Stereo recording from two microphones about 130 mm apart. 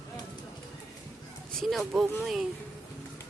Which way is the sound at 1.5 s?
Centre (ahead or behind).